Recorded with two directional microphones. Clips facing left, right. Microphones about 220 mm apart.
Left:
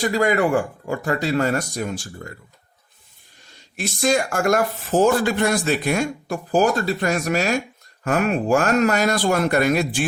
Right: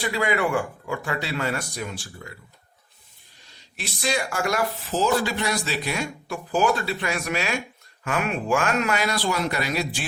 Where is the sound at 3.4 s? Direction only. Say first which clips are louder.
Left 8 dB; 45° left (ahead or behind).